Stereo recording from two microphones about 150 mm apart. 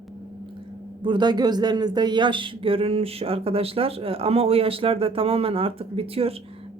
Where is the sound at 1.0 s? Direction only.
30° right (ahead or behind).